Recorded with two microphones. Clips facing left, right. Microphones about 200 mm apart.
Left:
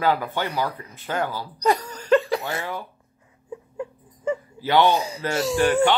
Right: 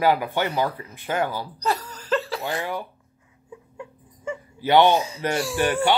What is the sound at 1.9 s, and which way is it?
Laughter, 5° right (ahead or behind).